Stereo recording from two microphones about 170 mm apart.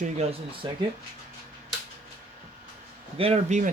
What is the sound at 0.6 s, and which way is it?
Speech, 30° right (ahead or behind).